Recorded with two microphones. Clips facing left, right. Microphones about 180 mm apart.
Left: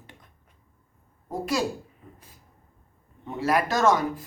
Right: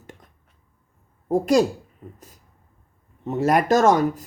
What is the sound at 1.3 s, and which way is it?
Speech, 50° right (ahead or behind).